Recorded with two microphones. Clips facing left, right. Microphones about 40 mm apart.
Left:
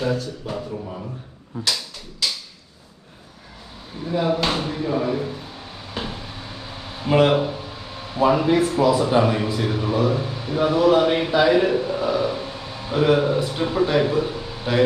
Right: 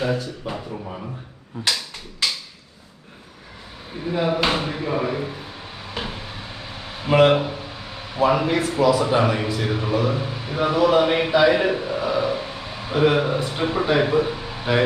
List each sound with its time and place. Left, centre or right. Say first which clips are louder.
0.0 s speech: even; centre
3.9 s drawer open or close: even; centre
8.2 s a man's voice: left 2 dB; centre